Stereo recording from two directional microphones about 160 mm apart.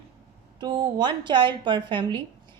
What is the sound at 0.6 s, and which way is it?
Speech, 30° right (ahead or behind).